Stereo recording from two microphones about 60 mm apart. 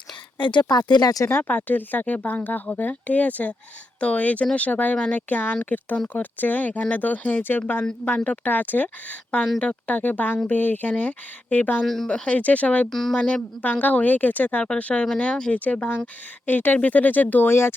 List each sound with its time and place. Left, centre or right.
0.6 s speech: left
1.5 s speech: left
12.9 s speech: centre
13.1 s speech: left